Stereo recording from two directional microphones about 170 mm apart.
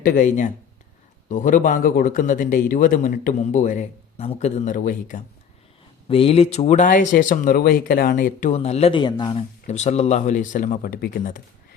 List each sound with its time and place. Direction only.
0.0 s speech: 50° left (ahead or behind)
6.1 s speech: 35° left (ahead or behind)
9.6 s speech: 40° left (ahead or behind); by 11.4 s 60° left (ahead or behind)